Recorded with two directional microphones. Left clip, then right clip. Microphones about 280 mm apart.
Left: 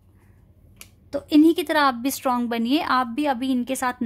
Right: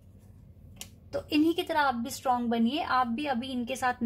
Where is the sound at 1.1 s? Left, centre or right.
Left.